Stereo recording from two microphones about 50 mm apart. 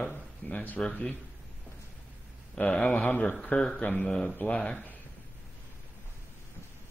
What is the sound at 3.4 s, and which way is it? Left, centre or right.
Speech, left.